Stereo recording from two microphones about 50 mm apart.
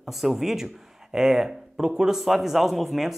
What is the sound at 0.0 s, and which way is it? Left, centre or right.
Speech, centre.